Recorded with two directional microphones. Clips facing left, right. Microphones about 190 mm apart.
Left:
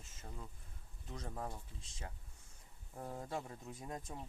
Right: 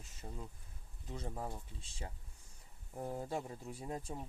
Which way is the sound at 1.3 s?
15° right (ahead or behind).